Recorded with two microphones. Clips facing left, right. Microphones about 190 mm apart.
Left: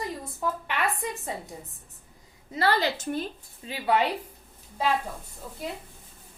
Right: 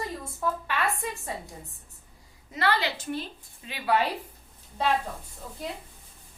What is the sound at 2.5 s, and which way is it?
A woman's voice, 35° left (ahead or behind).